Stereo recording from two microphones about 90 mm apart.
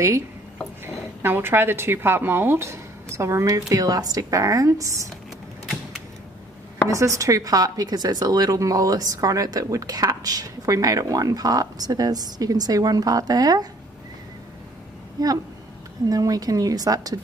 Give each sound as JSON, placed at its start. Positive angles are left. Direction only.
{"t": 0.8, "sound": "a woman's voice", "side_deg": -25}
{"t": 6.9, "sound": "a woman's voice", "side_deg": -40}
{"t": 15.2, "sound": "a woman's voice", "side_deg": -45}